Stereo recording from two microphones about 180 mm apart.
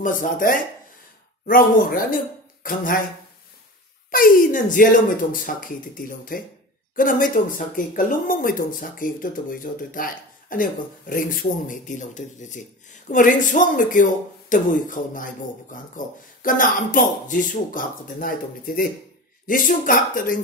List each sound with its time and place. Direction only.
0.0 s speech: 50° left (ahead or behind)
4.1 s speech: 50° left (ahead or behind)